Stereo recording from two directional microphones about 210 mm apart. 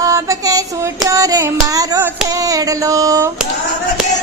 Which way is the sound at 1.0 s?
15° right (ahead or behind).